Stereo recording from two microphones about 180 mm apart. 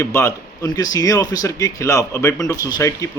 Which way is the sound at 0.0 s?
15° left (ahead or behind).